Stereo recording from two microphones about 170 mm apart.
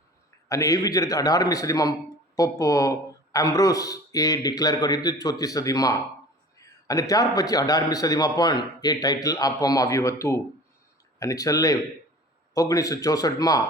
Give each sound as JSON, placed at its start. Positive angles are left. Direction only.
{"t": 0.4, "sound": "a man's voice", "side_deg": 20}